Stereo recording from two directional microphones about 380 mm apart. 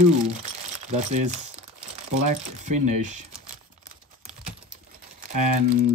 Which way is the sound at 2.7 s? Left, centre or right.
Right.